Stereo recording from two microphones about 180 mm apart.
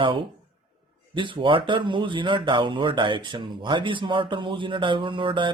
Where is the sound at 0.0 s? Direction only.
30° right (ahead or behind).